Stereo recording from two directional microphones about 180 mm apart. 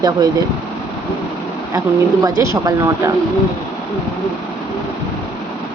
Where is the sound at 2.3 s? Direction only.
20° right (ahead or behind).